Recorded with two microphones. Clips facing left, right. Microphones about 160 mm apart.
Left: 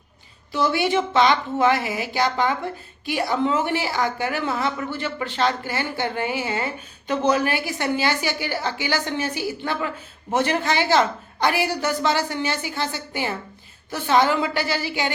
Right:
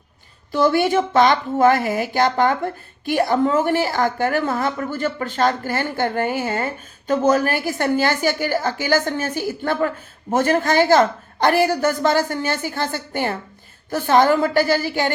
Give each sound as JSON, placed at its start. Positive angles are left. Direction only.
{"t": 0.5, "sound": "a woman's voice", "side_deg": -50}